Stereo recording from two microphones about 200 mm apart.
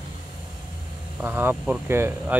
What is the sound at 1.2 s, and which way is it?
Speech, 10° right (ahead or behind).